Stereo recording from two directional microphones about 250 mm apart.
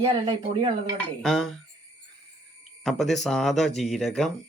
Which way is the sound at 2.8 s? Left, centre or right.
Centre.